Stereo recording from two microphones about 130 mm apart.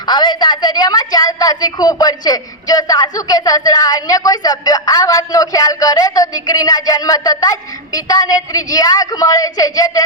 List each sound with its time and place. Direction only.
0.0 s a woman's voice: 35° left (ahead or behind)